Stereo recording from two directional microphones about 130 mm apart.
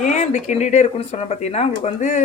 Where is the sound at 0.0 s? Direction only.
70° left (ahead or behind).